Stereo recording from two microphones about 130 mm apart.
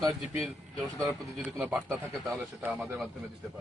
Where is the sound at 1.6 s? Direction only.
10° right (ahead or behind).